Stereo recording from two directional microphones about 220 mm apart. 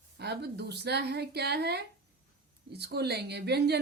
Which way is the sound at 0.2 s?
50° right (ahead or behind).